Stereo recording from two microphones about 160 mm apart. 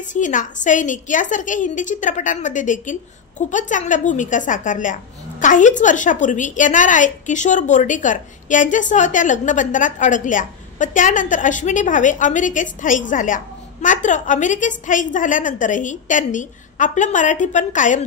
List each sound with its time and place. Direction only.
0.0 s a woman's voice: 50° left (ahead or behind)